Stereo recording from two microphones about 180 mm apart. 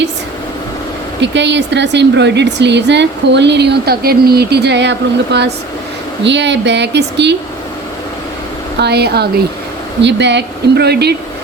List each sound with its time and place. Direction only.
1.2 s a woman's voice: 80° right
8.8 s speech: 65° right (ahead or behind)
10.0 s a woman's voice: 75° right (ahead or behind)